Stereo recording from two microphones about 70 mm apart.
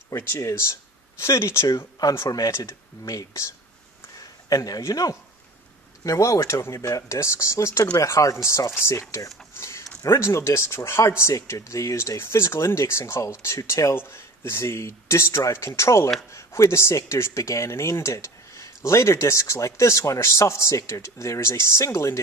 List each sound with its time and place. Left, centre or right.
0.1 s a man's voice: left
9.6 s a sound: left
10.0 s speech: left
12.2 s speech: left
13.9 s speech: left